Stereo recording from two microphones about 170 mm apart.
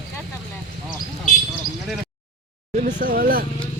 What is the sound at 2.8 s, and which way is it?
Speech, 50° right (ahead or behind).